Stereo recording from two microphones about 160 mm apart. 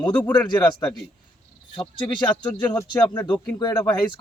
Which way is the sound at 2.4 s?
10° left (ahead or behind).